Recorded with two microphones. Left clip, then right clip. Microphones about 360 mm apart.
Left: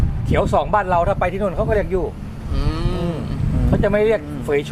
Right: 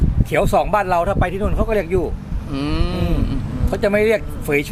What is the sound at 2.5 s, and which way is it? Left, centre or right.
Cattle, right.